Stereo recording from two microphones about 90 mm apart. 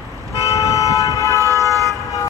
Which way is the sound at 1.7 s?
40° right (ahead or behind).